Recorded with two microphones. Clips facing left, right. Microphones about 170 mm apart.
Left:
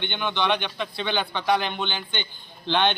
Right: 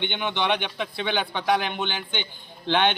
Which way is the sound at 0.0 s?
15° right (ahead or behind).